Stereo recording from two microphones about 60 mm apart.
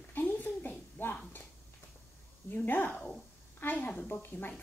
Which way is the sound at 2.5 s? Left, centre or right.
Left.